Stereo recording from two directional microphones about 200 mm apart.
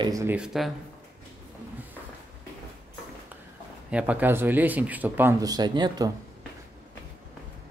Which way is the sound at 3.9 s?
5° right (ahead or behind).